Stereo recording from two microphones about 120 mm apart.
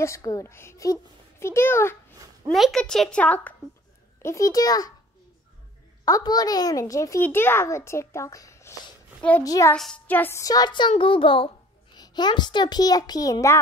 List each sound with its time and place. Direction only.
0.0 s a child's voice: 30° left (ahead or behind)
2.5 s speech: centre (ahead or behind)
4.2 s a child's voice: 25° left (ahead or behind)
6.0 s a child's voice: 30° left (ahead or behind)
9.8 s a woman's voice: 5° left (ahead or behind)
10.0 s a sound: 15° left (ahead or behind)
10.4 s a child's voice: 35° left (ahead or behind)
12.0 s a child's voice: 35° left (ahead or behind)